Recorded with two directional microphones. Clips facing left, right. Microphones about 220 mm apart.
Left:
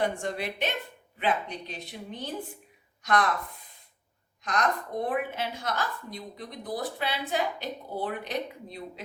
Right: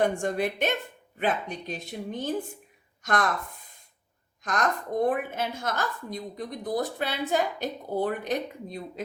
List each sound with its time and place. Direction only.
0.0 s a woman's voice: 50° right (ahead or behind)
4.4 s a woman's voice: 45° right (ahead or behind)